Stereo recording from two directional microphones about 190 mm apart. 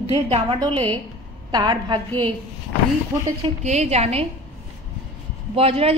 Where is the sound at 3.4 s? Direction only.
35° right (ahead or behind).